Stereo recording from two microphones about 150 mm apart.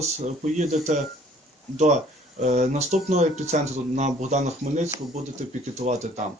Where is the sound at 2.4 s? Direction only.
50° right (ahead or behind).